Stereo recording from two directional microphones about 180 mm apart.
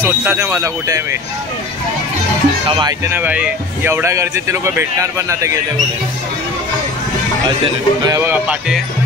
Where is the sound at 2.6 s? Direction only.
25° right (ahead or behind).